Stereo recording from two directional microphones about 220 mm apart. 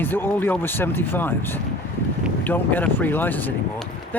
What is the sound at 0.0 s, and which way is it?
Speech, 10° left (ahead or behind).